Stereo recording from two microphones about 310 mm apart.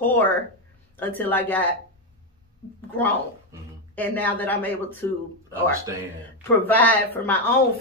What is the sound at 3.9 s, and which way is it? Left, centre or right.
Speech, centre.